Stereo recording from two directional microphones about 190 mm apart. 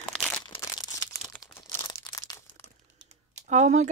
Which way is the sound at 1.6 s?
25° left (ahead or behind).